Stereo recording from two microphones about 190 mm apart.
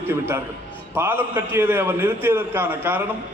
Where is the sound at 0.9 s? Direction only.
10° right (ahead or behind).